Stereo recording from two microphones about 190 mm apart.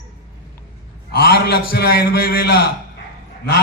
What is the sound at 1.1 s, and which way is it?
A man's voice, 55° left (ahead or behind).